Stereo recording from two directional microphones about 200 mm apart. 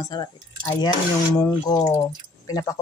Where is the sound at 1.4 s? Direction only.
20° left (ahead or behind).